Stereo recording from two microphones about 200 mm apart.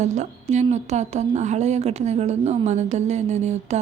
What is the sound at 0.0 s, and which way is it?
Speech, 35° right (ahead or behind).